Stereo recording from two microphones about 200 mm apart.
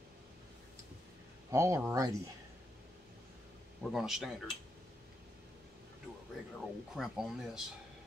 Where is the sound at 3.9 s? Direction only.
Centre (ahead or behind).